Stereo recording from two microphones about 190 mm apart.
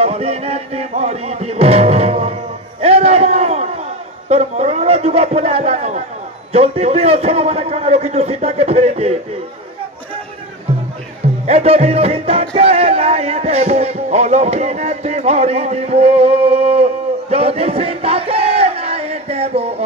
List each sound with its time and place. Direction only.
0.0 s music: 30° right (ahead or behind)
2.8 s a sound: 30° right (ahead or behind)
4.3 s music: 35° right (ahead or behind)
11.4 s music: 35° right (ahead or behind)